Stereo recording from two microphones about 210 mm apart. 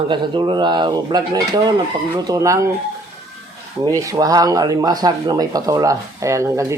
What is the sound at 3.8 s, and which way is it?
Speech, 15° right (ahead or behind).